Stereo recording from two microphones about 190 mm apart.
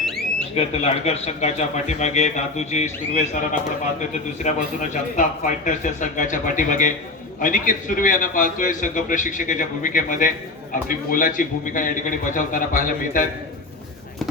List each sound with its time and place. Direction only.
0.5 s a man's voice: 35° left (ahead or behind)
4.4 s a man's voice: 40° left (ahead or behind)